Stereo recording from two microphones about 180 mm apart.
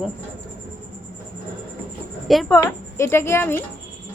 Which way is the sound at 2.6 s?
15° left (ahead or behind).